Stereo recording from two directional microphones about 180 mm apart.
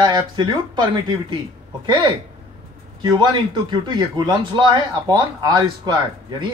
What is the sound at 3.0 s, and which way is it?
A man's voice, 25° right (ahead or behind).